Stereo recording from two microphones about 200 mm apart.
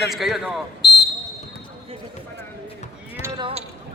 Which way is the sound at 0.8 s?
55° left (ahead or behind).